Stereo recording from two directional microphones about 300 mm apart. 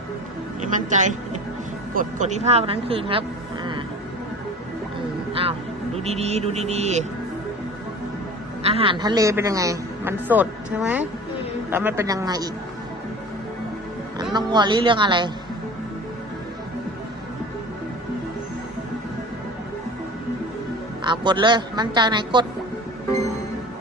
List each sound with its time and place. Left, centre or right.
0.9 s a woman's voice: right
5.3 s speech: centre
8.6 s speech: centre
14.3 s speech: centre
21.0 s speech: centre